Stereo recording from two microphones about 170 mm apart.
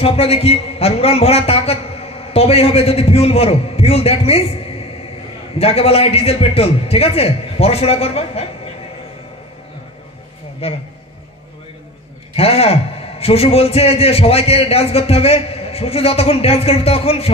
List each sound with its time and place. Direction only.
0.0 s a man's voice: 35° left (ahead or behind)
10.6 s a man's voice: 35° left (ahead or behind)
12.4 s a man's voice: 35° left (ahead or behind)